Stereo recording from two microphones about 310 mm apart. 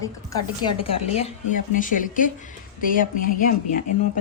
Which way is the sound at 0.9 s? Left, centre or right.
Centre.